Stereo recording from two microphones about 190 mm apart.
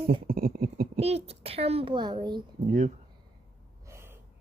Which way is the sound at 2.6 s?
40° right (ahead or behind).